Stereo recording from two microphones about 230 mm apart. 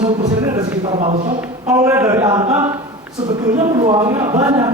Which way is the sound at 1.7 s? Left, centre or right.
Centre.